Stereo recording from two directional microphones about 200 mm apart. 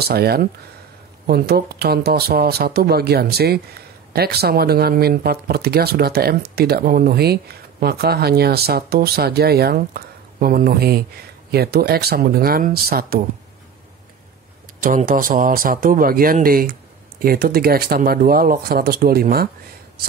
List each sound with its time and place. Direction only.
0.0 s speech: 50° right (ahead or behind)
14.8 s speech: 40° right (ahead or behind)